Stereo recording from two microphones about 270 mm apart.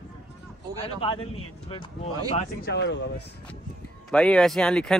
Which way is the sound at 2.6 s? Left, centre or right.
Left.